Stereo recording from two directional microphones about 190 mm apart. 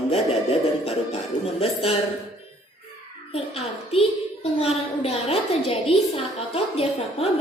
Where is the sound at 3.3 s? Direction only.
35° left (ahead or behind).